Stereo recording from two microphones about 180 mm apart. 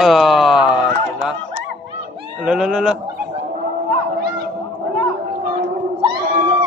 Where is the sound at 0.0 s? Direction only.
Centre (ahead or behind).